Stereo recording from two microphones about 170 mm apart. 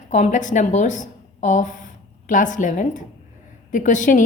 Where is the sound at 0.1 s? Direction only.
45° left (ahead or behind).